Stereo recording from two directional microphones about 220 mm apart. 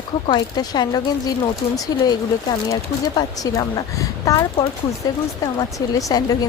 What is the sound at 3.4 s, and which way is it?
Speech, 15° left (ahead or behind).